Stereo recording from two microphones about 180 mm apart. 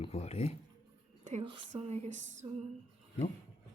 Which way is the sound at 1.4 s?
25° right (ahead or behind).